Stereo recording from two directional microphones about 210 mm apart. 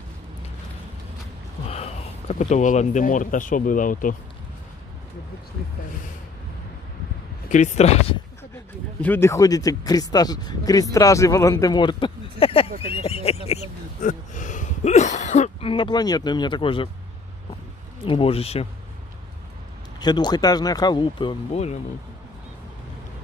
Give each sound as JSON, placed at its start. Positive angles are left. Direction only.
{"t": 1.7, "sound": "speech", "side_deg": 30}
{"t": 7.4, "sound": "speech", "side_deg": 35}
{"t": 9.0, "sound": "speech", "side_deg": 10}
{"t": 18.0, "sound": "speech", "side_deg": 25}
{"t": 20.0, "sound": "speech", "side_deg": 20}